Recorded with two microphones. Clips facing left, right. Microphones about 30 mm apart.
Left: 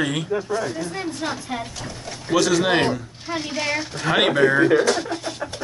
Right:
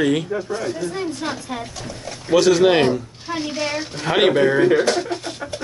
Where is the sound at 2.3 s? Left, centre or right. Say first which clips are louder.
Right 4 dB; centre.